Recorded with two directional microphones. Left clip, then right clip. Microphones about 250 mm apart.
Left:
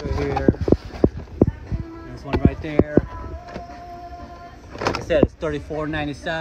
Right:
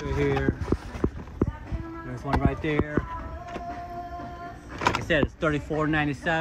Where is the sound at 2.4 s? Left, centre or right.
Centre.